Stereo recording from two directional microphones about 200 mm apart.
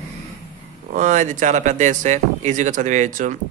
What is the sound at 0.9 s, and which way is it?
Speech, 35° right (ahead or behind).